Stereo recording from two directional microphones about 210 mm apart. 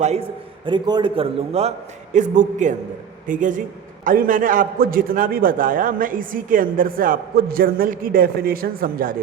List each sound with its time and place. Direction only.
0.0 s a man's voice: 30° right (ahead or behind)